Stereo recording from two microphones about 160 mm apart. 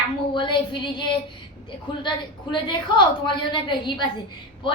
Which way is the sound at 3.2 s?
30° left (ahead or behind).